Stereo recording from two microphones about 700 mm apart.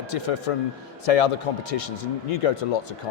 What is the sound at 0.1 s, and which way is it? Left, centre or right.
Speech, left.